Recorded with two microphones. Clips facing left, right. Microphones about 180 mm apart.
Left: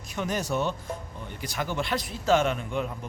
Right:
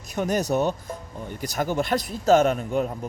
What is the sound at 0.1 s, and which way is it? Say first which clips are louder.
A man's voice: right 5 dB; 40° right (ahead or behind).